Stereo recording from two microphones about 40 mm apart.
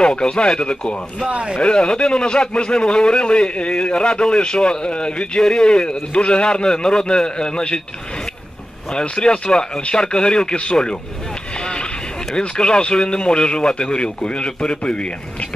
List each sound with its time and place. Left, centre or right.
0.0 s a man's voice: left
1.3 s speech: right
1.6 s a man's voice: left
8.9 s a man's voice: left
11.5 s vehicle: left
12.4 s a man's voice: left